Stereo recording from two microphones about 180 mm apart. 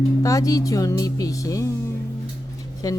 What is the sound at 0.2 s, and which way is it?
Speech, 20° left (ahead or behind).